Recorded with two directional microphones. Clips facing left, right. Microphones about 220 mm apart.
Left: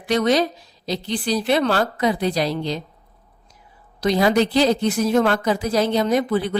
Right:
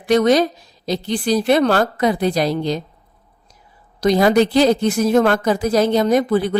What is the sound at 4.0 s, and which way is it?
A woman's voice, 45° right (ahead or behind).